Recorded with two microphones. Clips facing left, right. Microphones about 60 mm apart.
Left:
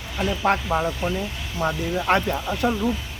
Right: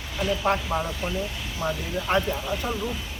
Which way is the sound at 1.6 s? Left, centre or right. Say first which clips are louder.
Left 5 dB; left.